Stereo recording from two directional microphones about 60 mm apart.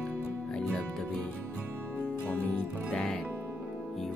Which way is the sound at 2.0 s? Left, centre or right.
Left.